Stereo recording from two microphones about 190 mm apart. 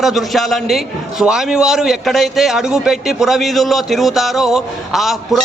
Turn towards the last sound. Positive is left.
turn(degrees=0)  # may be behind; listen again after turning